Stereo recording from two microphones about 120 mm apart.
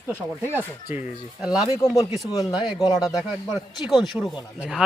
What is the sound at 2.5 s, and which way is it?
A man's voice, 10° right (ahead or behind).